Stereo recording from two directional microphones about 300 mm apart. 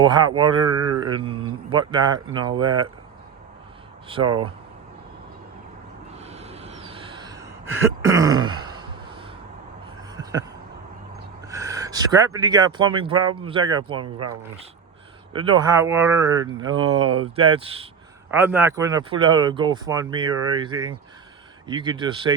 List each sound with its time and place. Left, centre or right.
0.0 s speech: centre
0.6 s speech: right
1.2 s speech: centre
4.2 s speech: right
6.1 s a sound: right
11.4 s speech: centre
15.3 s speech: centre
18.3 s speech: centre